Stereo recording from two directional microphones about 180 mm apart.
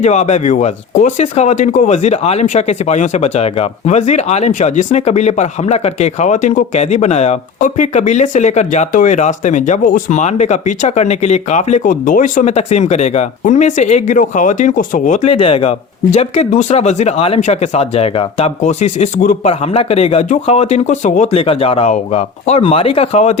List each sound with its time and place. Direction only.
0.0 s speech: 40° left (ahead or behind)
19.5 s speech: 35° left (ahead or behind)